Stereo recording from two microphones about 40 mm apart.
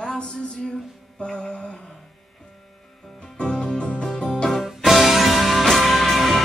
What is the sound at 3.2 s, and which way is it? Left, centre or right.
Music, centre.